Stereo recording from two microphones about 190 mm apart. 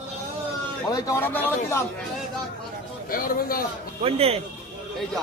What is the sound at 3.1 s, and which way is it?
Speech, 50° left (ahead or behind).